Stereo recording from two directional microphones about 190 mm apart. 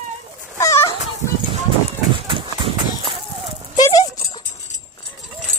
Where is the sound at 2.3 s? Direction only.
25° right (ahead or behind).